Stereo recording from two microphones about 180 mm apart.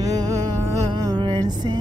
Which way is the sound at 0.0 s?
20° right (ahead or behind).